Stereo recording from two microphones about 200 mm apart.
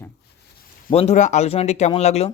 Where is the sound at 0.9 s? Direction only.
30° left (ahead or behind).